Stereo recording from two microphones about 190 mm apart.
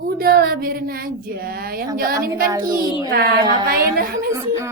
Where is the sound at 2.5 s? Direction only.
20° right (ahead or behind).